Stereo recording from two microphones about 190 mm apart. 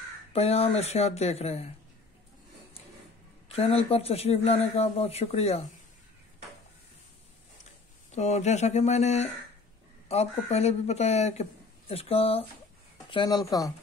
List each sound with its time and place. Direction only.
0.3 s speech: 30° left (ahead or behind)
3.5 s speech: 30° left (ahead or behind)
8.1 s speech: 35° left (ahead or behind); by 13.7 s 20° left (ahead or behind)